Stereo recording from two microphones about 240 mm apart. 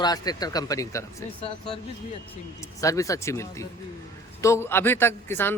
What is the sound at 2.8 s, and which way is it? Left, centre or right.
Speech, centre.